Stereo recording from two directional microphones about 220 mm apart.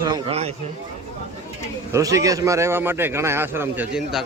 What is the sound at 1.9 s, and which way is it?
A man's voice, 15° right (ahead or behind).